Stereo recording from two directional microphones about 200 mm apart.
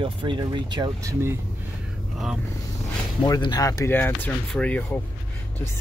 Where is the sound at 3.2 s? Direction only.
20° left (ahead or behind).